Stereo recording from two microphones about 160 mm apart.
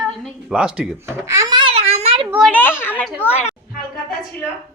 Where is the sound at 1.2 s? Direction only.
20° right (ahead or behind); by 2.3 s 40° right (ahead or behind).